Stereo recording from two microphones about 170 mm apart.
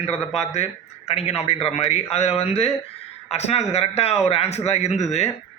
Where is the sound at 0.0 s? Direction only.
40° left (ahead or behind).